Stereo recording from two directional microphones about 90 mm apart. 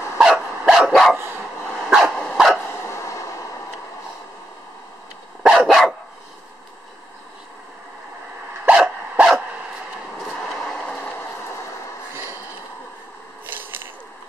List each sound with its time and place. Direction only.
0.2 s dog: 5° right (ahead or behind)
2.9 s train: 35° left (ahead or behind)
5.4 s dog: 5° right (ahead or behind)
8.6 s dog: 10° right (ahead or behind)
13.5 s a sound: 20° right (ahead or behind)